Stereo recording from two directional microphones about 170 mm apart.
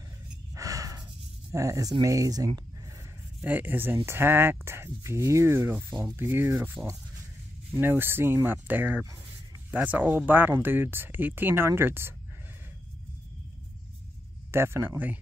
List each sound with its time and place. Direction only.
0.6 s a sound: 20° right (ahead or behind)
1.5 s speech: 20° right (ahead or behind)
3.3 s speech: 10° right (ahead or behind)
14.5 s speech: 15° right (ahead or behind)